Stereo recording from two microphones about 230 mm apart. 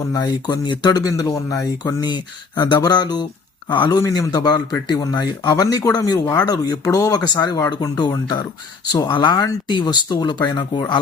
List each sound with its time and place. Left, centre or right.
0.1 s a man's voice: centre